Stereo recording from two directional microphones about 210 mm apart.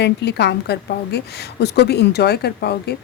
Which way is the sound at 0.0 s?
55° left (ahead or behind).